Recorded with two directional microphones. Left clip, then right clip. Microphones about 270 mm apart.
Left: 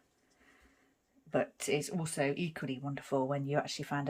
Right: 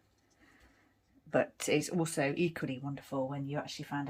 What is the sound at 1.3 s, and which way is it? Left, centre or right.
Speech, centre.